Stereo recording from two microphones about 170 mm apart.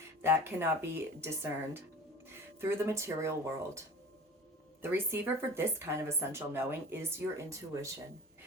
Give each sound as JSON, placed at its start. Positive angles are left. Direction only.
{"t": 0.2, "sound": "speech", "side_deg": -15}